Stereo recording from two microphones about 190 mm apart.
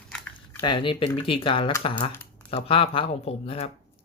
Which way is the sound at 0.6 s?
25° left (ahead or behind).